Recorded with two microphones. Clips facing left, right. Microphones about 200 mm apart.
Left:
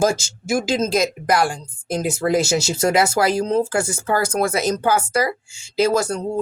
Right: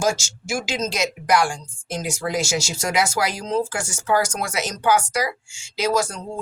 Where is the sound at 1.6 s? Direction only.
55° left (ahead or behind).